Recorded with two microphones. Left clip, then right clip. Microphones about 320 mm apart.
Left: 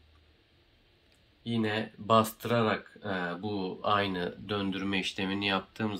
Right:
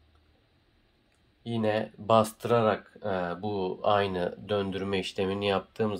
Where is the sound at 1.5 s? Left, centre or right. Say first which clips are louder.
Right 4 dB; right.